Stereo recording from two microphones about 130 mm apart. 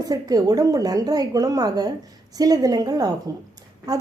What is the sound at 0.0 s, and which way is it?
A woman's voice, 30° right (ahead or behind).